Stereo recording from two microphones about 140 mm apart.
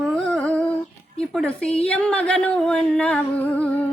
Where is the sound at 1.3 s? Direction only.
5° left (ahead or behind).